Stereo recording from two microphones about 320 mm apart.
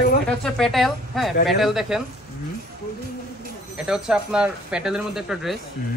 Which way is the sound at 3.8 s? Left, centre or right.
Centre.